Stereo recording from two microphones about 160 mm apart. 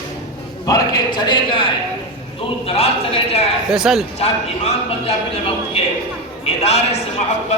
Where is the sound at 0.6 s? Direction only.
25° left (ahead or behind).